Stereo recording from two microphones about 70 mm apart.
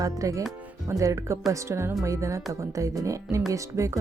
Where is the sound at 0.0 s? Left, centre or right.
Right.